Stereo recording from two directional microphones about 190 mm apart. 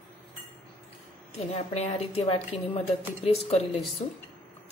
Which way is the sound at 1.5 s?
35° left (ahead or behind).